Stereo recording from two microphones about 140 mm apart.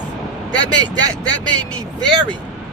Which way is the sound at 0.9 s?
30° right (ahead or behind).